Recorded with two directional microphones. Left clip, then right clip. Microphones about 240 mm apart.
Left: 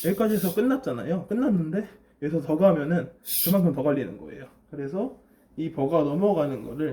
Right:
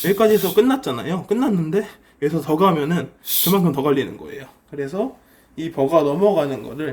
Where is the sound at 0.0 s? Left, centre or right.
Right.